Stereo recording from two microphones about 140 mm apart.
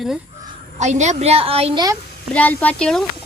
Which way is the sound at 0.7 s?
55° right (ahead or behind).